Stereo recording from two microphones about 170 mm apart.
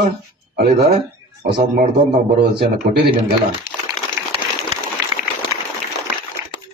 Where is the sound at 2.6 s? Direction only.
65° right (ahead or behind).